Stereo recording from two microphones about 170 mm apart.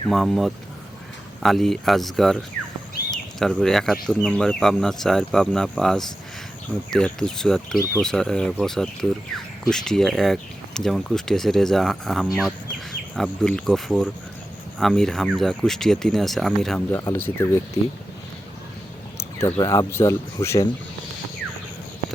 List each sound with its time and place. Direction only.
0.1 s speech: centre (ahead or behind)
17.0 s speech: 15° left (ahead or behind)
19.4 s speech: 20° left (ahead or behind)